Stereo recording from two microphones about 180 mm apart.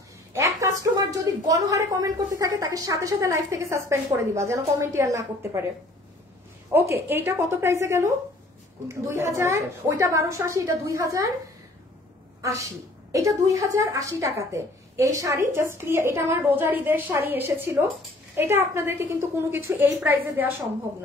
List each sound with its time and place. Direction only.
0.3 s a woman's voice: 20° right (ahead or behind)
6.7 s a woman's voice: 10° right (ahead or behind)
12.4 s a woman's voice: 20° right (ahead or behind)